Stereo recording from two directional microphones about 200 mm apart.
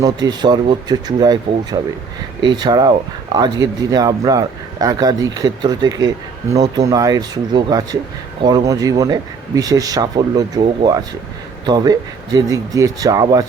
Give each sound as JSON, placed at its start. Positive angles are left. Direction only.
{"t": 0.0, "sound": "speech", "side_deg": -20}